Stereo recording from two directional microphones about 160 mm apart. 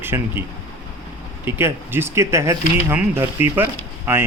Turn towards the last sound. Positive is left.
turn(degrees=-15)  # may be behind; listen again after turning